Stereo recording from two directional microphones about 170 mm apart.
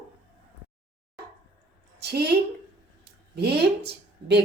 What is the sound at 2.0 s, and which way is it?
A woman's voice, 75° right (ahead or behind).